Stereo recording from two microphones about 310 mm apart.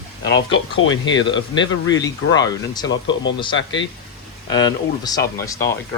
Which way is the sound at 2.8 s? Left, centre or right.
Left.